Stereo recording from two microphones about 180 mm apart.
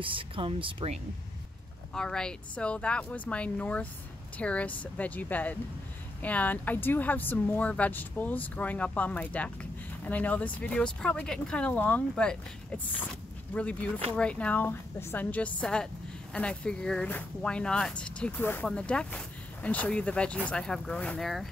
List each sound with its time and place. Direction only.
0.0 s speech: 30° right (ahead or behind)
2.0 s speech: 5° left (ahead or behind)